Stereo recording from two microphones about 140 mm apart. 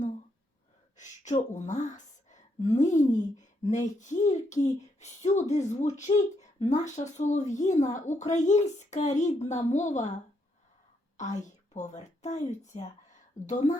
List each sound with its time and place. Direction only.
0.9 s a woman's voice: 60° left (ahead or behind)
11.2 s a woman's voice: 60° left (ahead or behind)